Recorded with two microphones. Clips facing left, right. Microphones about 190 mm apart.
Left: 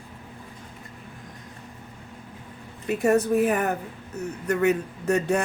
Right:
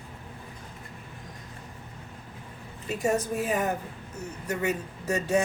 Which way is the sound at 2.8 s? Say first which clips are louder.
Left 6 dB; 60° left (ahead or behind).